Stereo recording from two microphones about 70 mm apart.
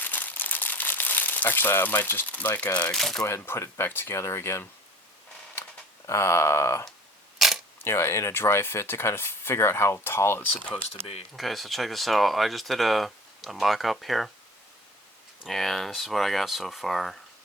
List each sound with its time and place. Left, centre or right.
0.0 s crumpling: left
2.9 s speech: centre
3.2 s speech: left
6.1 s speech: left
7.3 s camera: centre
7.9 s speech: left
11.3 s speech: centre
15.4 s speech: centre